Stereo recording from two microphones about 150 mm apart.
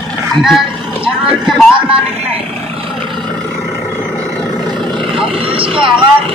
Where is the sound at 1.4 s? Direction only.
5° right (ahead or behind).